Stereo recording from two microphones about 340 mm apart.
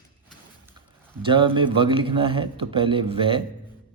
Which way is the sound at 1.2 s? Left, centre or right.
Centre.